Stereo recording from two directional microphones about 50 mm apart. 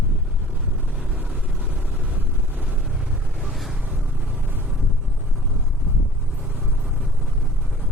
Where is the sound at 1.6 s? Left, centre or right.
Right.